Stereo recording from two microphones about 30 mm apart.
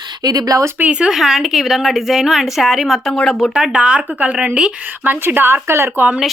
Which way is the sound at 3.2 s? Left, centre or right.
Left.